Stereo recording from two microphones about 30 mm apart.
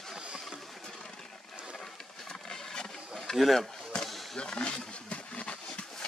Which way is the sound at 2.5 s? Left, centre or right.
Left.